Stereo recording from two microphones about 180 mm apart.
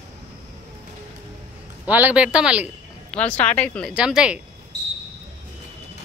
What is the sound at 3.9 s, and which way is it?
Speech, 5° right (ahead or behind).